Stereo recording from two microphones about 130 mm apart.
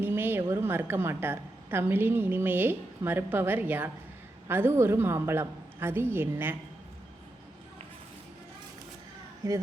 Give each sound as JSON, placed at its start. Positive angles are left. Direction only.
{"t": 0.0, "sound": "a woman's voice", "side_deg": -15}
{"t": 9.4, "sound": "speech", "side_deg": -25}